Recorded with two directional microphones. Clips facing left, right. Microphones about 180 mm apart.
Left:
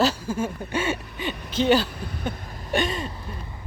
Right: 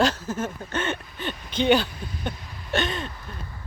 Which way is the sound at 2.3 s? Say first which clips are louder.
Left 4 dB; 45° left (ahead or behind).